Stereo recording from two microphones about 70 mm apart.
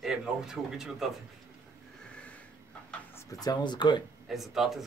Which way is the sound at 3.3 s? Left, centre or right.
Left.